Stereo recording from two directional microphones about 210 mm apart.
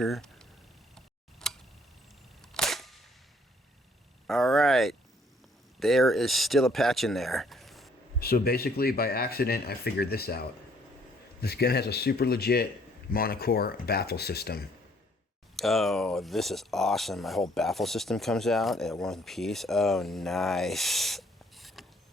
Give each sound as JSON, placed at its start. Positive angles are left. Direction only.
{"t": 0.0, "sound": "speech", "side_deg": 0}
{"t": 0.9, "sound": "tick", "side_deg": 5}
{"t": 2.4, "sound": "cap gun", "side_deg": 0}
{"t": 4.3, "sound": "speech", "side_deg": 0}
{"t": 8.2, "sound": "speech", "side_deg": 45}
{"t": 15.5, "sound": "speech", "side_deg": 0}